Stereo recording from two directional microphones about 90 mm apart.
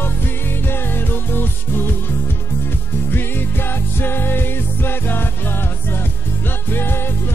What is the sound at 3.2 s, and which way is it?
Music, 25° left (ahead or behind).